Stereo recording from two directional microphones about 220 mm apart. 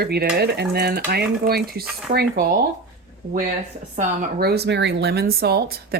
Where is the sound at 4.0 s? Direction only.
45° right (ahead or behind).